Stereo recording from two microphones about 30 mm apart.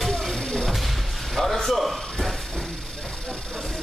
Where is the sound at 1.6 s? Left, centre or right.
Centre.